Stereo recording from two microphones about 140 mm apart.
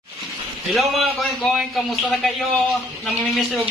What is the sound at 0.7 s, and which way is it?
Speech, centre (ahead or behind).